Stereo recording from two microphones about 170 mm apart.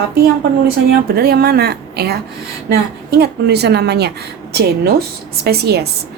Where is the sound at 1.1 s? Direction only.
70° right (ahead or behind).